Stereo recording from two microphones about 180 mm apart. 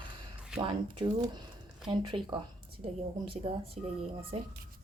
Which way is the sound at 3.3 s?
30° right (ahead or behind).